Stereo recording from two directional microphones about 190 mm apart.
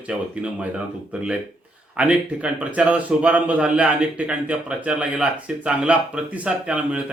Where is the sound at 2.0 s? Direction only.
5° right (ahead or behind).